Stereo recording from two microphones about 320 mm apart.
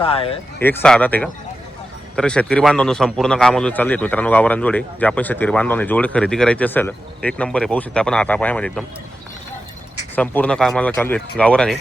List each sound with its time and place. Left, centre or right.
0.0 s speech: centre
0.6 s a man's voice: centre
10.2 s a man's voice: centre